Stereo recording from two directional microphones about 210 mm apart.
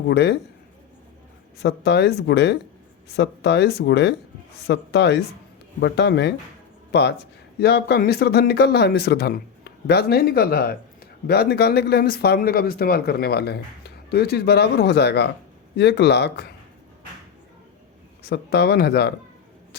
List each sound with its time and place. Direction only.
0.1 s speech: 50° left (ahead or behind)
1.5 s speech: 55° left (ahead or behind)
18.3 s speech: 50° left (ahead or behind)